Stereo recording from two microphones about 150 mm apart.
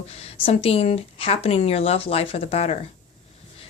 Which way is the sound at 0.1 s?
40° left (ahead or behind).